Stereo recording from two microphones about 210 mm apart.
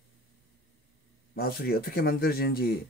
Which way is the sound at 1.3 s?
45° left (ahead or behind).